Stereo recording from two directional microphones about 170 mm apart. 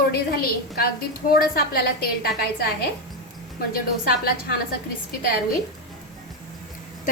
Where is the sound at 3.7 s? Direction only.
65° left (ahead or behind).